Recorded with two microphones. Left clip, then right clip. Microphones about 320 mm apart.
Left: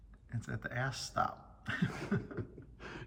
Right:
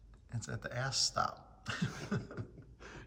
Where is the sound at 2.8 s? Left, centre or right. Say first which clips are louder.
Left 4 dB; left.